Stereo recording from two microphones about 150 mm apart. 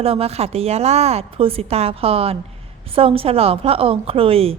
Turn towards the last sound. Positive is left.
turn(degrees=-40)  # may be behind; listen again after turning